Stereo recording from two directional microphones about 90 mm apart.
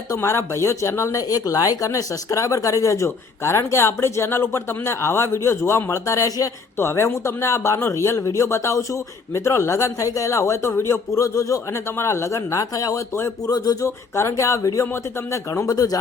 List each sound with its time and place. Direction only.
0.1 s speech: 30° left (ahead or behind)